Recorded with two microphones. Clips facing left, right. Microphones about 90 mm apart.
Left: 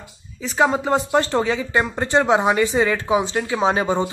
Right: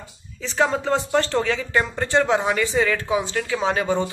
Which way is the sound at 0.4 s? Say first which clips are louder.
Left 3 dB; 15° left (ahead or behind).